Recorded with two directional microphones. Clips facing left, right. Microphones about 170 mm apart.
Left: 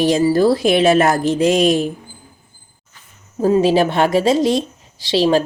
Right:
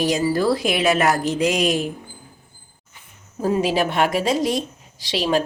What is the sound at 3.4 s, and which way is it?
Speech, 30° left (ahead or behind).